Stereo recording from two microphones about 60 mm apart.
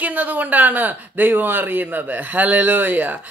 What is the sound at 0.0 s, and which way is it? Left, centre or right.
Speech, right.